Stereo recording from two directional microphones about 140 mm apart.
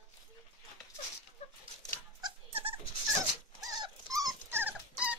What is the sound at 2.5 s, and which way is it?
Dog, 40° right (ahead or behind).